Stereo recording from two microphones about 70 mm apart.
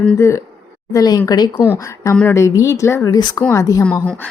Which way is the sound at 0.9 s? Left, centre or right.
Left.